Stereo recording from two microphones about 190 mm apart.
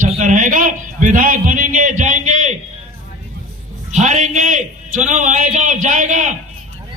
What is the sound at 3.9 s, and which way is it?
A man's voice, 40° right (ahead or behind).